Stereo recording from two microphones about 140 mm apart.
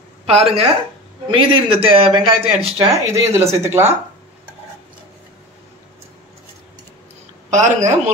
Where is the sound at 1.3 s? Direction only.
35° right (ahead or behind).